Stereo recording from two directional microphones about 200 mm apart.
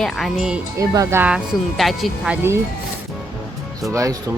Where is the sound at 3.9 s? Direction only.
15° right (ahead or behind).